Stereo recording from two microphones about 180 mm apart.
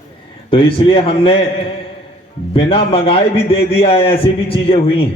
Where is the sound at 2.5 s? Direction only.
30° left (ahead or behind).